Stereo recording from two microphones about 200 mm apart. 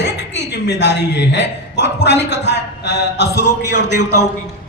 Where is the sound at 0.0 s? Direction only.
60° left (ahead or behind).